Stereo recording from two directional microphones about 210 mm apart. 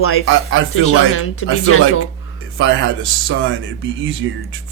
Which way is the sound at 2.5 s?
65° right (ahead or behind).